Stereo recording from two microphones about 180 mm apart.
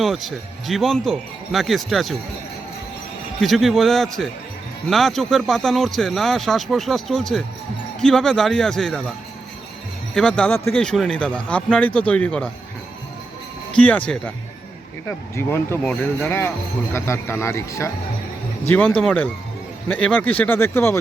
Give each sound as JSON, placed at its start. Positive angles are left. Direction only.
{"t": 0.0, "sound": "a man's voice", "side_deg": 0}
{"t": 3.4, "sound": "a man's voice", "side_deg": 0}
{"t": 10.2, "sound": "a man's voice", "side_deg": 5}
{"t": 13.7, "sound": "speech", "side_deg": 10}
{"t": 15.4, "sound": "speech", "side_deg": 15}